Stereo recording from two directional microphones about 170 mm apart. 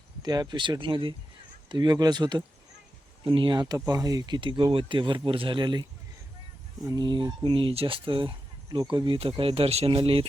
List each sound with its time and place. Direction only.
0.2 s speech: 25° right (ahead or behind)
6.8 s speech: 25° right (ahead or behind)